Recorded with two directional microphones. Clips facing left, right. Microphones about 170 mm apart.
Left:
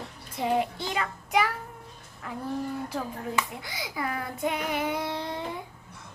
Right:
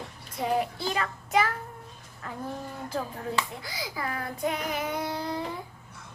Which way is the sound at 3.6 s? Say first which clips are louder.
Left 1 dB; 20° left (ahead or behind).